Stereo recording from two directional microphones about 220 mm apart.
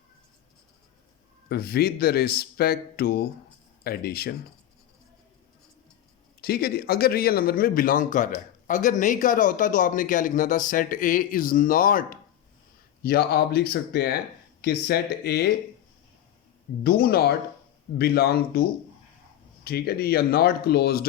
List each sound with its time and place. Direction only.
1.5 s speech: 45° left (ahead or behind)
6.4 s speech: 45° left (ahead or behind)
16.8 s speech: 45° left (ahead or behind)